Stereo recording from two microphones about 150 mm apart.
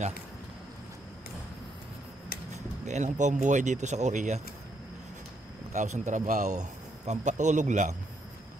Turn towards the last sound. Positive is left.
turn(degrees=-55)  # may be behind; listen again after turning